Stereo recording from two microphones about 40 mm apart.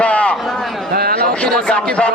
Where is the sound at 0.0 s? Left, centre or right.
Left.